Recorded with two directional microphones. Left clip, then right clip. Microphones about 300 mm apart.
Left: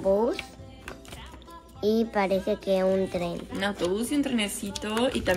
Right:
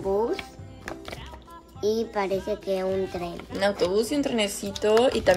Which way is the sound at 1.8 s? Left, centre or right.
Centre.